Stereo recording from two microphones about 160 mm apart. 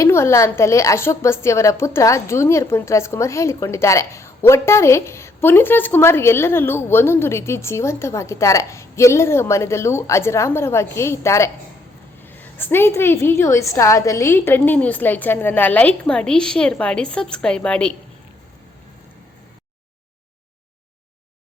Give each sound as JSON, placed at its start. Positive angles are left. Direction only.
{"t": 0.0, "sound": "a woman's voice", "side_deg": 15}